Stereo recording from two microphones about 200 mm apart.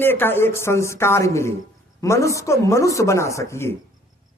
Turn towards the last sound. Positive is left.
turn(degrees=15)  # may be behind; listen again after turning